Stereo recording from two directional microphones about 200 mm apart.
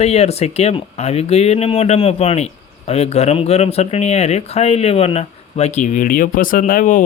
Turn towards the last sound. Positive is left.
turn(degrees=40)  # may be behind; listen again after turning